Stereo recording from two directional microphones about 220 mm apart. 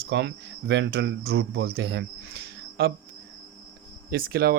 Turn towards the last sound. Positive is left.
turn(degrees=-45)  # may be behind; listen again after turning